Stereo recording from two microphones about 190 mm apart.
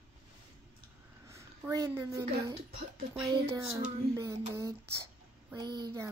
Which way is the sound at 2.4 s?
25° right (ahead or behind).